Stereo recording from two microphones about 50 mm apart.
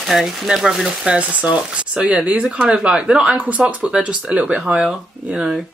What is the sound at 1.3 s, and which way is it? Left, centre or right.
Speech, right.